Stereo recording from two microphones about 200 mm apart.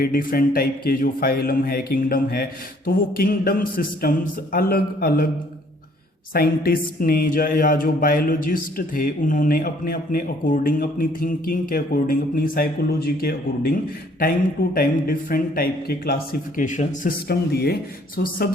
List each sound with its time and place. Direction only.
0.0 s speech: 45° left (ahead or behind)
6.3 s speech: 50° left (ahead or behind)